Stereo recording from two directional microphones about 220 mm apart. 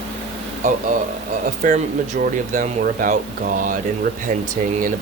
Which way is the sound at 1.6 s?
35° right (ahead or behind).